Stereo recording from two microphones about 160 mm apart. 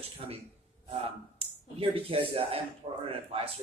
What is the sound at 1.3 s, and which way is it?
Speech, 35° right (ahead or behind).